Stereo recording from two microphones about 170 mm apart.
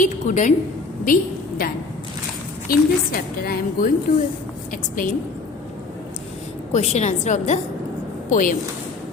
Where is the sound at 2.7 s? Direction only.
60° left (ahead or behind).